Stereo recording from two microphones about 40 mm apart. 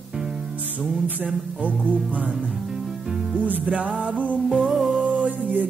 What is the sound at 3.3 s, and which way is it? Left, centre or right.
Music, right.